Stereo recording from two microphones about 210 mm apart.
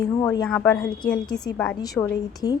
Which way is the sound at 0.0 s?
15° left (ahead or behind).